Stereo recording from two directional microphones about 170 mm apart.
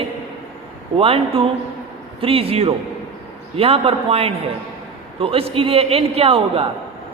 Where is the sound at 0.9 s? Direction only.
35° right (ahead or behind).